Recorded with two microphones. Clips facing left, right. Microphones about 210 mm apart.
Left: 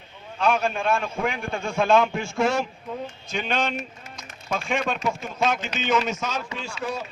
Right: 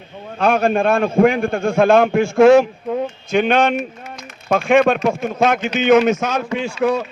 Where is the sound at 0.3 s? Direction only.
60° right (ahead or behind).